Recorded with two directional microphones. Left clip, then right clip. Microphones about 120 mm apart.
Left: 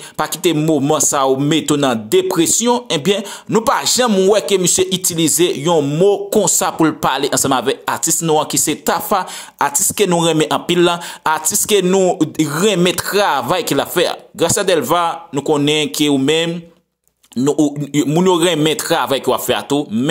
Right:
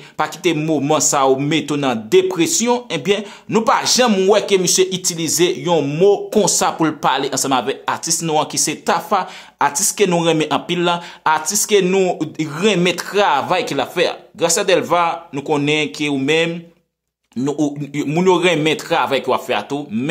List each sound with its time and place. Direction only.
0.2 s a woman's voice: 40° left (ahead or behind)
5.8 s speech: 15° left (ahead or behind)
6.0 s a woman's voice: 40° left (ahead or behind)
17.5 s speech: 40° left (ahead or behind)